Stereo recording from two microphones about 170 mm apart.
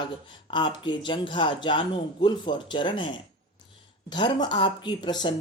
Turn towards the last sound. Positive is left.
turn(degrees=25)  # may be behind; listen again after turning